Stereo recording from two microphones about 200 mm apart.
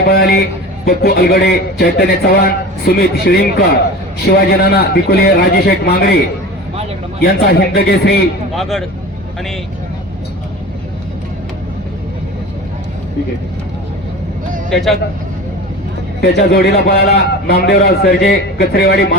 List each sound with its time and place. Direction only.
0.0 s a man's voice: 50° left (ahead or behind)
7.2 s a man's voice: 50° left (ahead or behind)
8.5 s speech: centre (ahead or behind)
14.7 s speech: centre (ahead or behind)
16.2 s a man's voice: 55° left (ahead or behind)